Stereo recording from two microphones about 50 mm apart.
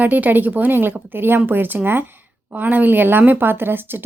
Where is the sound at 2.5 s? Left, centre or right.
Right.